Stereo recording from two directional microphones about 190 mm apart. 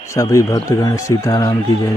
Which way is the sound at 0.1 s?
15° left (ahead or behind).